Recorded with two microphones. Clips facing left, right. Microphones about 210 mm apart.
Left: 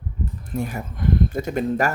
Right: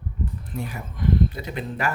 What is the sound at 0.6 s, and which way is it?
Speech, 45° left (ahead or behind).